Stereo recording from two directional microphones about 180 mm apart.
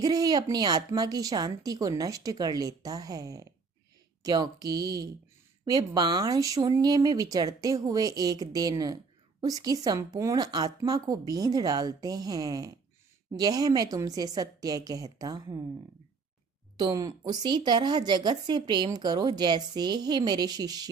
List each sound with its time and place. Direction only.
0.0 s speech: 20° right (ahead or behind)
16.7 s speech: 20° right (ahead or behind)